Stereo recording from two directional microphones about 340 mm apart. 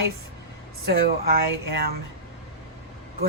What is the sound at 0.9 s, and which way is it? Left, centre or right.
Speech, right.